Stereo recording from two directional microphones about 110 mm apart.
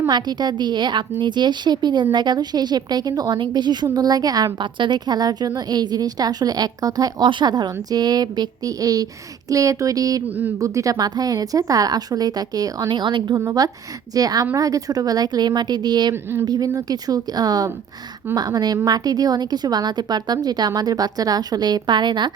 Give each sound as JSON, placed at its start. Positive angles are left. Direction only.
{"t": 0.1, "sound": "a woman's voice", "side_deg": -40}
{"t": 10.2, "sound": "speech", "side_deg": -15}
{"t": 10.6, "sound": "a woman's voice", "side_deg": -30}
{"t": 13.3, "sound": "a woman's voice", "side_deg": -30}
{"t": 16.1, "sound": "speech", "side_deg": -20}
{"t": 16.5, "sound": "a woman's voice", "side_deg": -30}